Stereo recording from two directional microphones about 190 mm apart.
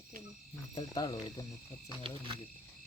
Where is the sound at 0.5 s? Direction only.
20° left (ahead or behind).